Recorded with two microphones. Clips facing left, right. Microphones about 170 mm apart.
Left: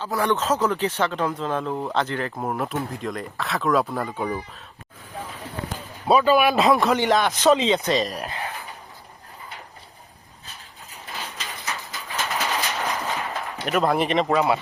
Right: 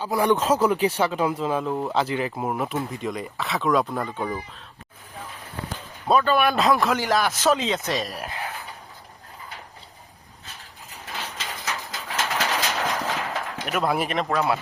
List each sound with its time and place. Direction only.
0.0 s speech: 10° right (ahead or behind)
6.1 s speech: 5° left (ahead or behind)
11.6 s bird: 90° right
13.7 s speech: 5° right (ahead or behind)